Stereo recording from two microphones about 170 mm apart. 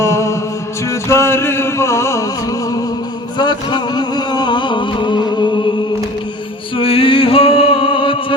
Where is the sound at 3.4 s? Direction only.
25° left (ahead or behind).